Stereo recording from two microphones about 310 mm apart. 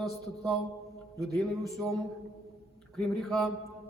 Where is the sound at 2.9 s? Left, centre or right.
Centre.